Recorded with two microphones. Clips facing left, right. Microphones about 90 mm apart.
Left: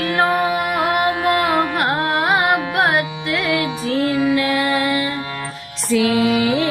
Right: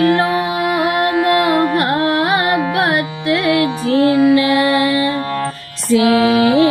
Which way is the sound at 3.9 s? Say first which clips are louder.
Right 6 dB; 65° right (ahead or behind).